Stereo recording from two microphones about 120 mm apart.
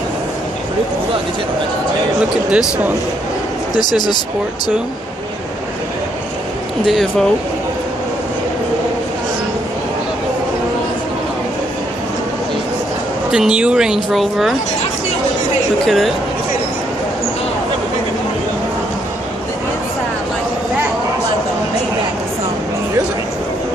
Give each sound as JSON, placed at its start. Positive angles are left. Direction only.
{"t": 2.5, "sound": "speech", "side_deg": -10}
{"t": 3.7, "sound": "speech", "side_deg": 35}
{"t": 6.9, "sound": "speech", "side_deg": 0}
{"t": 13.3, "sound": "speech", "side_deg": -5}
{"t": 15.8, "sound": "speech", "side_deg": 0}